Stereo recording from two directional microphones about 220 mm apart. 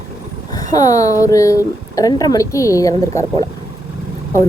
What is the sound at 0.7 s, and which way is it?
A woman's voice, 15° left (ahead or behind).